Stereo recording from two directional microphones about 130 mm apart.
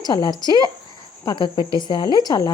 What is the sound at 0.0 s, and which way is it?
Speech, 35° left (ahead or behind).